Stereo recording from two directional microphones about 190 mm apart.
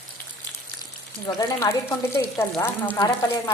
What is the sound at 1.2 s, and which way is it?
Speech, 15° left (ahead or behind).